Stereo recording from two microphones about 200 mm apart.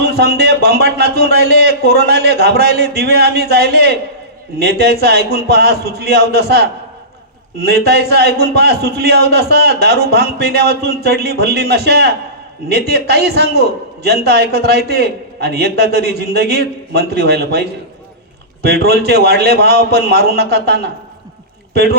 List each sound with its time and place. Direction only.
0.0 s a man's voice: 55° right (ahead or behind)